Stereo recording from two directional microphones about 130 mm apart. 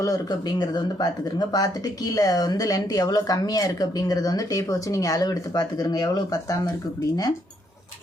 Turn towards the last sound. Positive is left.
turn(degrees=30)  # may be behind; listen again after turning